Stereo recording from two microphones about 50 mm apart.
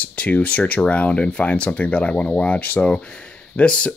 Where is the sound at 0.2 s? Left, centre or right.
Left.